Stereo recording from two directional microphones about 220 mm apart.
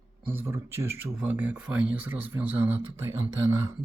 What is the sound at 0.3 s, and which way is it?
Speech, 10° right (ahead or behind).